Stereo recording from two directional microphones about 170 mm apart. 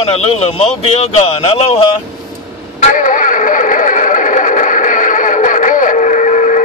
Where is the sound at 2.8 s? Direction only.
50° left (ahead or behind).